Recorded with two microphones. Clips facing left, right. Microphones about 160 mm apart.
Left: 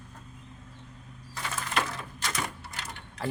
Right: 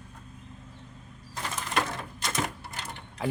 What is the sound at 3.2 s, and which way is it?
Speech, 15° right (ahead or behind).